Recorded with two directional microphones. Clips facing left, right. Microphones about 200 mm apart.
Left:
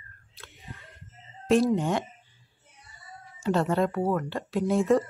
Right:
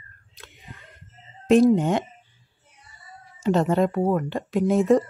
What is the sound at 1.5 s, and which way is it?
Speech, 20° right (ahead or behind).